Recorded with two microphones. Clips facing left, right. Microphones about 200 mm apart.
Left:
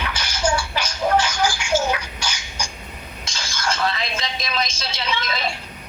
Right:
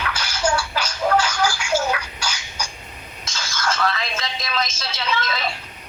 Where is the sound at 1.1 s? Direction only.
10° right (ahead or behind).